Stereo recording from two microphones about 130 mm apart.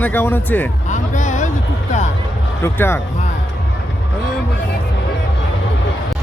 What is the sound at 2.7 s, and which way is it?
Speech, 15° left (ahead or behind).